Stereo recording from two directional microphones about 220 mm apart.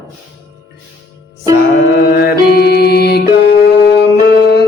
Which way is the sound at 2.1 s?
45° left (ahead or behind).